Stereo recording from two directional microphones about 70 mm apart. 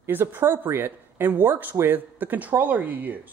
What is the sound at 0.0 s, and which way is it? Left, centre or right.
Speech, right.